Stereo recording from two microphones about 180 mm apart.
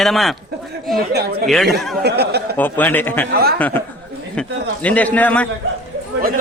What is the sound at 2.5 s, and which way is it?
Speech, 10° left (ahead or behind).